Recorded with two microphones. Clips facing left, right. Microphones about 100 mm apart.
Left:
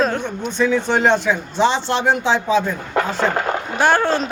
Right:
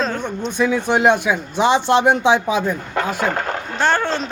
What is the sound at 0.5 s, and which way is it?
Speech, 15° right (ahead or behind).